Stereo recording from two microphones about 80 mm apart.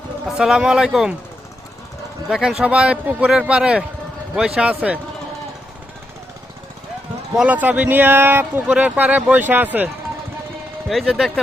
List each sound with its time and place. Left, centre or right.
0.3 s speech: centre
2.3 s speech: centre
7.4 s speech: centre
10.8 s speech: centre